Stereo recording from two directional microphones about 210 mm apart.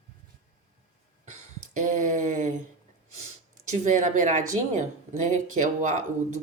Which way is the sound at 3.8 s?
35° right (ahead or behind).